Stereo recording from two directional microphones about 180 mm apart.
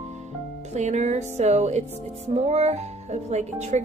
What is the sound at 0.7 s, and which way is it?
Music, 40° right (ahead or behind).